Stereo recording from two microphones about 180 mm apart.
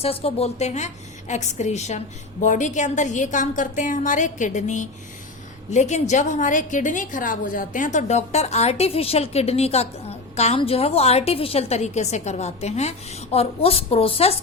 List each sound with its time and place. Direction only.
0.0 s a woman's voice: 30° left (ahead or behind)